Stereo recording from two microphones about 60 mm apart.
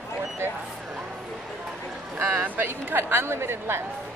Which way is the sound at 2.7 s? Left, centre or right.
Right.